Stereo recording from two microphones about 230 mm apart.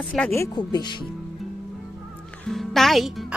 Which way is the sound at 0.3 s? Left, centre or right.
Centre.